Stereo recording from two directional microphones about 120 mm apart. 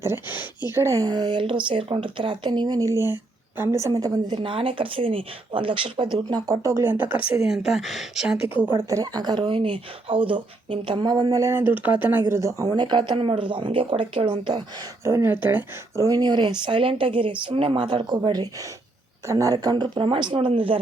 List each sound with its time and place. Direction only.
0.0 s speech: 20° right (ahead or behind)
7.4 s speech: 5° right (ahead or behind)
8.7 s speech: 30° right (ahead or behind)
12.3 s speech: 25° right (ahead or behind); by 14.6 s 40° right (ahead or behind)
15.0 s speech: 20° right (ahead or behind)
16.0 s speech: 30° right (ahead or behind); by 20.7 s 45° right (ahead or behind)